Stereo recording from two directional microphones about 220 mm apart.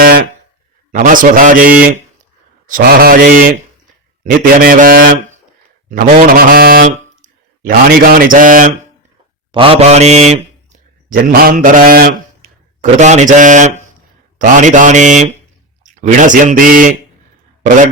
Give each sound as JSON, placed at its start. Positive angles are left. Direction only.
{"t": 0.0, "sound": "a sound", "side_deg": -45}
{"t": 0.9, "sound": "speech", "side_deg": -35}
{"t": 9.5, "sound": "a man's voice", "side_deg": -25}